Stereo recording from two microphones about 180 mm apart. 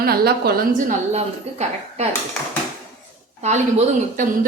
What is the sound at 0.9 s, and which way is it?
Speech, 35° right (ahead or behind).